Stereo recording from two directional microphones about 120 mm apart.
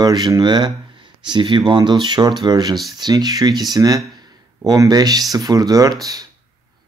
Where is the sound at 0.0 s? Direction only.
35° right (ahead or behind).